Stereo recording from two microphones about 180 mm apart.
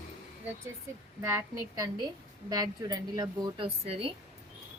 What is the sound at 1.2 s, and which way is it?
A woman's voice, 15° right (ahead or behind).